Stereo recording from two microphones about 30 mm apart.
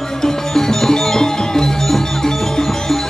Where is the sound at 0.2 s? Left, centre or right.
Centre.